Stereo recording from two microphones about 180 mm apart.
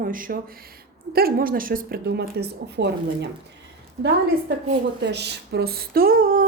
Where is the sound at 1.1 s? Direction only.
60° right (ahead or behind).